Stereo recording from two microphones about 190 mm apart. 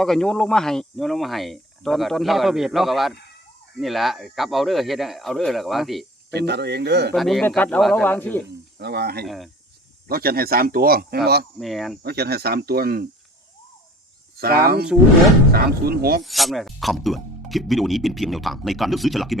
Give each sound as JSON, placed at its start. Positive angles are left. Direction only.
{"t": 0.0, "sound": "speech", "side_deg": 5}
{"t": 6.3, "sound": "speech", "side_deg": -60}
{"t": 7.1, "sound": "speech", "side_deg": 0}
{"t": 8.8, "sound": "speech", "side_deg": -60}
{"t": 9.2, "sound": "speech", "side_deg": 0}
{"t": 10.1, "sound": "speech", "side_deg": -55}
{"t": 11.6, "sound": "speech", "side_deg": 0}
{"t": 12.0, "sound": "speech", "side_deg": -55}
{"t": 14.3, "sound": "speech", "side_deg": -55}
{"t": 16.2, "sound": "speech", "side_deg": 0}